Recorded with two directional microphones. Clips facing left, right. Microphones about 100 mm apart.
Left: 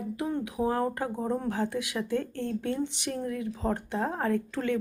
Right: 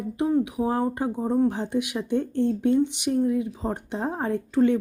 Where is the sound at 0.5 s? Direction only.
25° right (ahead or behind).